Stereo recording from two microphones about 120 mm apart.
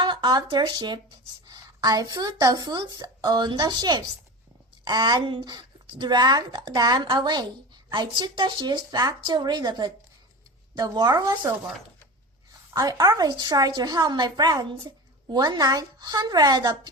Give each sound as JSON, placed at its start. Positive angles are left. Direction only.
{"t": 0.0, "sound": "a woman's voice", "side_deg": -40}
{"t": 12.7, "sound": "a woman's voice", "side_deg": -30}